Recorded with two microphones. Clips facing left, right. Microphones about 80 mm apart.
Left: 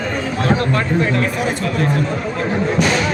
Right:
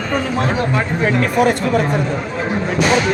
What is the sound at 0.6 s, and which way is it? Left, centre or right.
Speech, centre.